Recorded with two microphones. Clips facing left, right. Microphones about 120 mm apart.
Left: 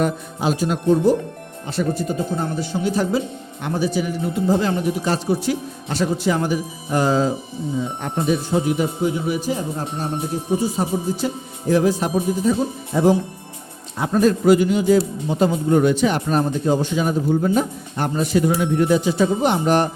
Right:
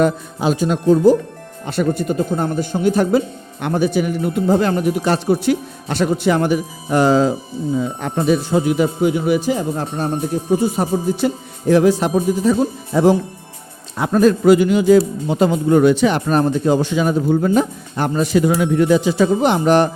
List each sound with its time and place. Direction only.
1.6 s a man's voice: 60° right (ahead or behind)
8.0 s a man's voice: 90° right
10.6 s a man's voice: 60° right (ahead or behind)
11.7 s a man's voice: 80° right